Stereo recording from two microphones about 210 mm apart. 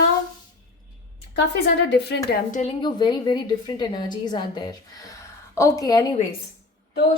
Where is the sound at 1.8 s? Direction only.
55° left (ahead or behind).